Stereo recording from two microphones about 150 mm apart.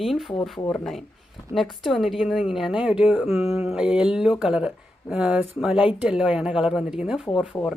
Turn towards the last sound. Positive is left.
turn(degrees=20)  # may be behind; listen again after turning